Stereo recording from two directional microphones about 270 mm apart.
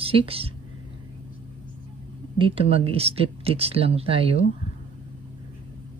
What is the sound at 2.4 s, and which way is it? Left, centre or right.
Speech, right.